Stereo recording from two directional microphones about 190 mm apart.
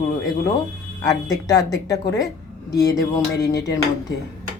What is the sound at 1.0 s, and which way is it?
Speech, 20° left (ahead or behind).